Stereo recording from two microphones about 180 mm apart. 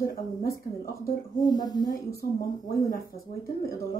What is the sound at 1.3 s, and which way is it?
Speech, 20° left (ahead or behind).